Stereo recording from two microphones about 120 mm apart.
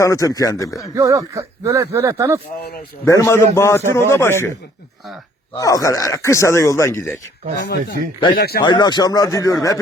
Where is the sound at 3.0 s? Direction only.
25° left (ahead or behind).